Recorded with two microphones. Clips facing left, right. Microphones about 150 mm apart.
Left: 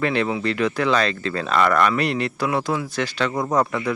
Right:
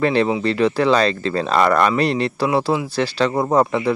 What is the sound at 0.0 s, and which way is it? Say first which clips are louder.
Speech: right 4 dB; 30° right (ahead or behind).